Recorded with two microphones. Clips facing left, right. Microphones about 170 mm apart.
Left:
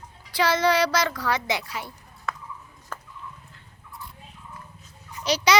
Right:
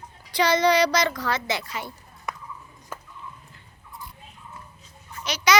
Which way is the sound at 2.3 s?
15° right (ahead or behind).